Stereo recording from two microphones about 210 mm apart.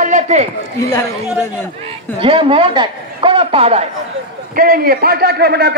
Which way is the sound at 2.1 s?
25° right (ahead or behind).